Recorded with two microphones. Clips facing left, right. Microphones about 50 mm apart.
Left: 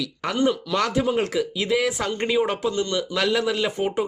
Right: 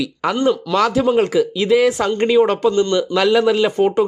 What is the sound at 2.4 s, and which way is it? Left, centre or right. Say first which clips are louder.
Speech: right 8 dB; right.